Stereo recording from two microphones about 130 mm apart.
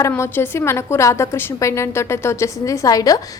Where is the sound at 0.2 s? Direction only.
20° left (ahead or behind).